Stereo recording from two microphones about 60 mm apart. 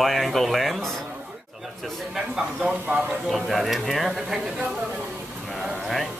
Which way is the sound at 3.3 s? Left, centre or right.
Centre.